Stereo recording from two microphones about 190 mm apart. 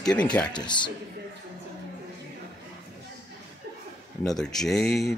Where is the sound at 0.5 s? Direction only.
25° left (ahead or behind).